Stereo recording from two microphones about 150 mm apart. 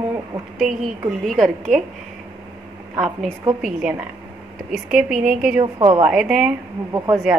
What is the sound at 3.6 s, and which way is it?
A woman's voice, 5° right (ahead or behind).